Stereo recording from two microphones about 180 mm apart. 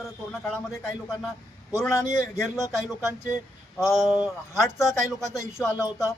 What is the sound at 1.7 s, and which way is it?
A man's voice, 15° left (ahead or behind).